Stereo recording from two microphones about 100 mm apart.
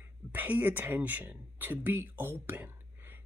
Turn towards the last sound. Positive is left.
turn(degrees=-20)  # may be behind; listen again after turning